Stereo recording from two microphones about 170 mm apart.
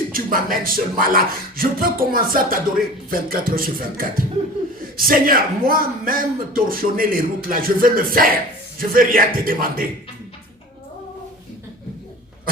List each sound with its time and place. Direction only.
0.1 s a man's voice: 55° right (ahead or behind)